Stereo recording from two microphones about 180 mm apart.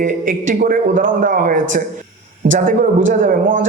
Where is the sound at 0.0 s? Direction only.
45° right (ahead or behind).